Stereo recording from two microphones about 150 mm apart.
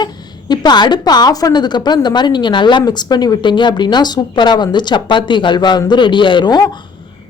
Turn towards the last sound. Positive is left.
turn(degrees=30)  # may be behind; listen again after turning